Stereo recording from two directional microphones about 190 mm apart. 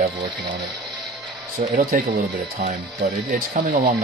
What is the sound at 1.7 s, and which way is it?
Speech, 50° right (ahead or behind).